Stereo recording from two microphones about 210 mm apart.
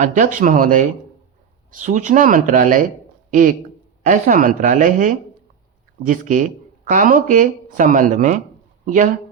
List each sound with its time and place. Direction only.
0.0 s speech: 40° right (ahead or behind)
4.0 s speech: 40° right (ahead or behind)